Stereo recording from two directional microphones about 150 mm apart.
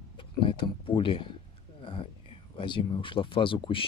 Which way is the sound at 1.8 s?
35° left (ahead or behind).